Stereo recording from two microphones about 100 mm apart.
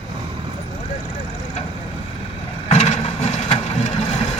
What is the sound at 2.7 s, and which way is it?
Vehicle, 90° left.